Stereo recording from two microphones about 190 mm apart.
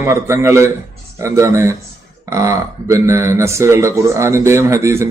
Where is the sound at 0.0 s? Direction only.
15° right (ahead or behind).